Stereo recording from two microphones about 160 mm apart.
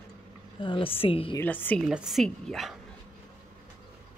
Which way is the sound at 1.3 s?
10° left (ahead or behind).